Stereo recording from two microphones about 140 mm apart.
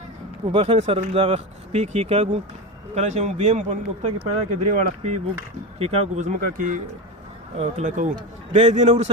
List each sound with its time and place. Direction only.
0.5 s a man's voice: 45° right (ahead or behind)